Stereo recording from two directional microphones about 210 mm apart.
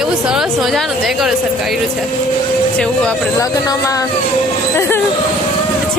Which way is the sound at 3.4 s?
15° left (ahead or behind).